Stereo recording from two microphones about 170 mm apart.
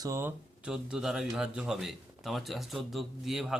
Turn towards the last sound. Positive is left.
turn(degrees=0)  # may be behind; listen again after turning